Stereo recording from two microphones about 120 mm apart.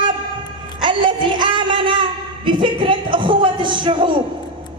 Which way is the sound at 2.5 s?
45° right (ahead or behind).